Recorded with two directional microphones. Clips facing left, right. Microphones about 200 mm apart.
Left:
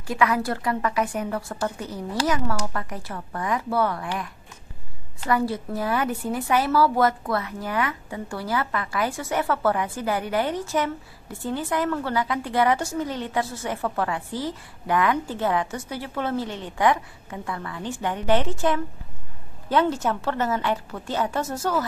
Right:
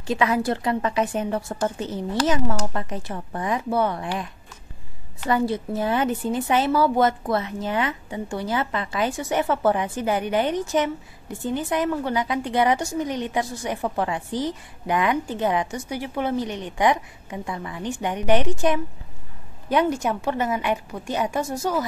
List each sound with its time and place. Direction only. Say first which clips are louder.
0.0 s a woman's voice: right 1 dB; 25° right (ahead or behind)
5.2 s a woman's voice: right 2 dB; 20° right (ahead or behind)